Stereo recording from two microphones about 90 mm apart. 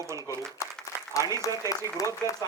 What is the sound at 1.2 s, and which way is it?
Speech, 40° left (ahead or behind).